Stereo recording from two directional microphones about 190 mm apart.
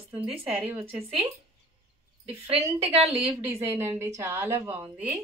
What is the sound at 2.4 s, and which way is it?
Speech, 30° right (ahead or behind).